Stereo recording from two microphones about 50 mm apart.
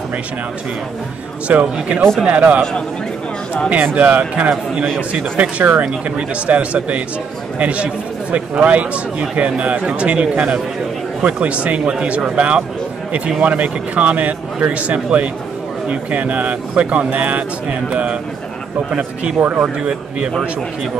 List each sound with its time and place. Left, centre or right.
1.5 s speech: right
3.7 s speech: right
19.6 s speech: right